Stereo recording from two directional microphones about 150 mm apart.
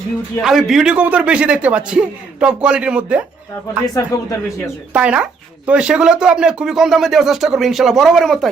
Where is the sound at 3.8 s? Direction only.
20° left (ahead or behind).